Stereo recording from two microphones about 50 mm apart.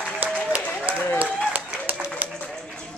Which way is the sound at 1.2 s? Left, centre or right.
Right.